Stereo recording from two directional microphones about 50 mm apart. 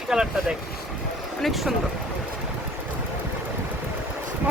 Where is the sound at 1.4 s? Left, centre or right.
Centre.